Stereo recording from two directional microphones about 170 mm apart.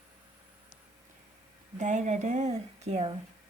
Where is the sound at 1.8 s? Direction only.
45° right (ahead or behind).